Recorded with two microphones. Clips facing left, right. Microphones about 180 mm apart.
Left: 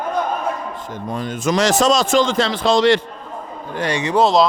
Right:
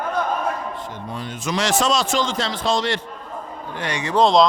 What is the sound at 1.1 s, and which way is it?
A man's voice, 45° left (ahead or behind).